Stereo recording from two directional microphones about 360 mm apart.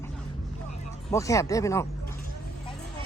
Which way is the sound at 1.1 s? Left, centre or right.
Centre.